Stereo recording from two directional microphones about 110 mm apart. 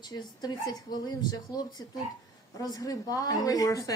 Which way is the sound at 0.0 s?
35° left (ahead or behind).